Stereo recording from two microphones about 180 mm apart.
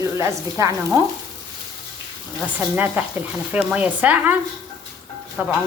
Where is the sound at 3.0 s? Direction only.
10° right (ahead or behind).